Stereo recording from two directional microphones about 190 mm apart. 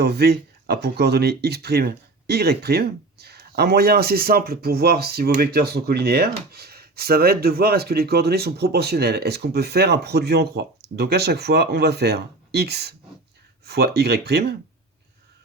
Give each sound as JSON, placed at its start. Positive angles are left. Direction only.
{"t": 0.0, "sound": "speech", "side_deg": -60}